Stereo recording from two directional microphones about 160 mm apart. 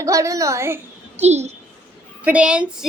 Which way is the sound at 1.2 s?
45° right (ahead or behind).